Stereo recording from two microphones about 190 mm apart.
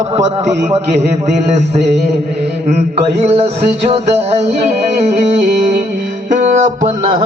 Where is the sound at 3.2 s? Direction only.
35° right (ahead or behind).